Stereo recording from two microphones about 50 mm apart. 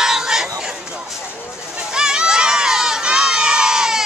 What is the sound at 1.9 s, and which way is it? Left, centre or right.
Crowd, centre.